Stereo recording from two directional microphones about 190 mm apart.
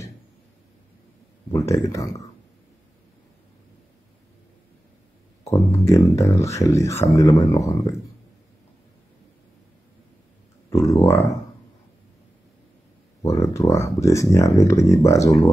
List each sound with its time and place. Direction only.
1.5 s speech: 15° left (ahead or behind)
5.4 s speech: 15° left (ahead or behind)
10.7 s speech: 15° left (ahead or behind)
13.2 s speech: 15° left (ahead or behind)